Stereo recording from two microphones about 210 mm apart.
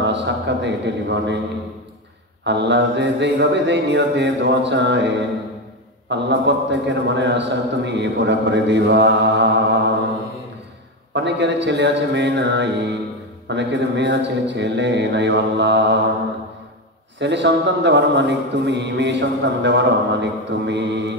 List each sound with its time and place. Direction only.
0.0 s a man's voice: 55° right (ahead or behind)
2.4 s a man's voice: 55° right (ahead or behind)
11.1 s a man's voice: 55° right (ahead or behind)
17.2 s a man's voice: 55° right (ahead or behind)